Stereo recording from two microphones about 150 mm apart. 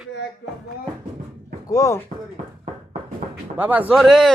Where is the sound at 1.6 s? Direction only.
20° left (ahead or behind).